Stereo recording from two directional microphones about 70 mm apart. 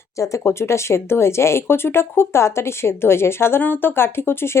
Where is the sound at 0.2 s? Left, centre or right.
Left.